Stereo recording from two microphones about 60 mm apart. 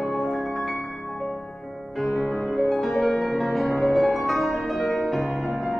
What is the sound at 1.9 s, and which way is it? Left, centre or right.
Music, centre.